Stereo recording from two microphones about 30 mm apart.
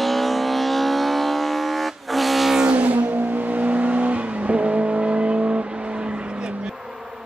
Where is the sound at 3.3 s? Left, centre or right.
Right.